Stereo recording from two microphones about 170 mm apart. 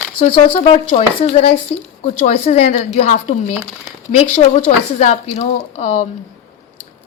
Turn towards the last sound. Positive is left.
turn(degrees=40)  # may be behind; listen again after turning